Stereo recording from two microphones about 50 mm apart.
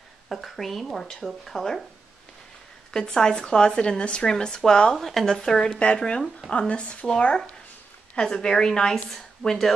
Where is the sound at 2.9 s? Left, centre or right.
Centre.